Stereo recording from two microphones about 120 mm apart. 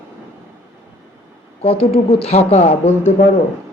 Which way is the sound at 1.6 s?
55° left (ahead or behind).